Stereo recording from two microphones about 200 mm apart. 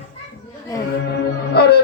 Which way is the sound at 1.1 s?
55° left (ahead or behind).